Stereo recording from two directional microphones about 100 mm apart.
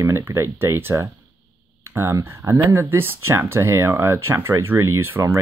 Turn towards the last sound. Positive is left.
turn(degrees=-25)  # may be behind; listen again after turning